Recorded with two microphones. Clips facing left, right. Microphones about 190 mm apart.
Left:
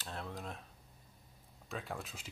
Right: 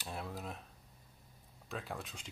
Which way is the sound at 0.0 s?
10° right (ahead or behind).